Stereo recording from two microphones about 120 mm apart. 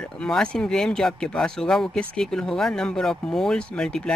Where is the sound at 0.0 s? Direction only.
5° left (ahead or behind).